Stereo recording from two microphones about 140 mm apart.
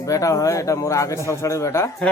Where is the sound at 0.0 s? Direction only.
25° left (ahead or behind).